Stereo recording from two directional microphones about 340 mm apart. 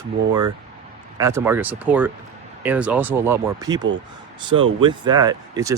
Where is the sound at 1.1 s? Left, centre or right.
Centre.